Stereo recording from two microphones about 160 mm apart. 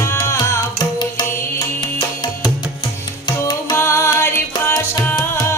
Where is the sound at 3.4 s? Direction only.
20° left (ahead or behind).